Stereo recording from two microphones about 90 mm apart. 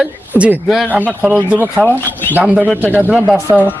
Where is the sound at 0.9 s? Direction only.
20° right (ahead or behind).